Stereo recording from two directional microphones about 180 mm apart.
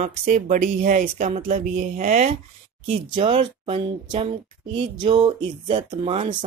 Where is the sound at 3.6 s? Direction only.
30° right (ahead or behind).